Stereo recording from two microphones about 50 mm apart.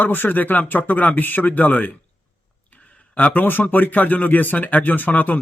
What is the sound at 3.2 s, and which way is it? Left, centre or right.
Speech, left.